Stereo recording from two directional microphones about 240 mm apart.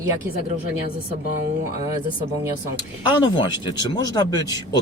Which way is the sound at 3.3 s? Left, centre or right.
Centre.